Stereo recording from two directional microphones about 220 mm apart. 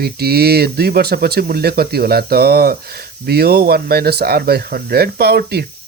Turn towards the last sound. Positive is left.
turn(degrees=-45)  # may be behind; listen again after turning